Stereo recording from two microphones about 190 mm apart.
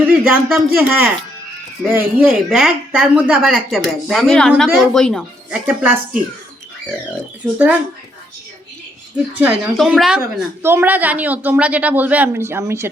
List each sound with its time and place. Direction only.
0.1 s a woman's voice: 5° right (ahead or behind)
9.1 s a woman's voice: 5° right (ahead or behind)